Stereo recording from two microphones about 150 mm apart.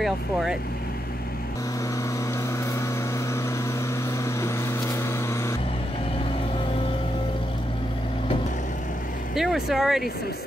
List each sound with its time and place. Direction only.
0.0 s speech: centre (ahead or behind)
4.2 s vehicle: 20° left (ahead or behind)
9.3 s speech: centre (ahead or behind)